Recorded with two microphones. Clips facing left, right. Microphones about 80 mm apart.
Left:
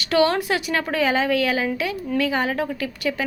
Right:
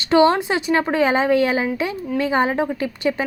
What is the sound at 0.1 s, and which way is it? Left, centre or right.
Speech, right.